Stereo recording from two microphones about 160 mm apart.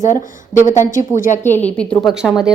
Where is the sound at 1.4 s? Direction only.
10° left (ahead or behind).